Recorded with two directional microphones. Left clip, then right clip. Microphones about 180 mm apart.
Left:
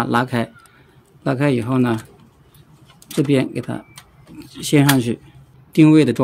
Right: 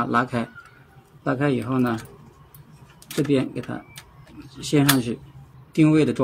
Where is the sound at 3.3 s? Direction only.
50° left (ahead or behind).